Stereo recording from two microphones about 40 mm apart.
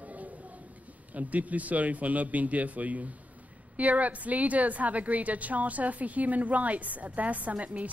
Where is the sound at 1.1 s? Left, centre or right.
Right.